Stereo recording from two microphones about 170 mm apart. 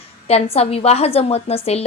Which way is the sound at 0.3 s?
35° left (ahead or behind).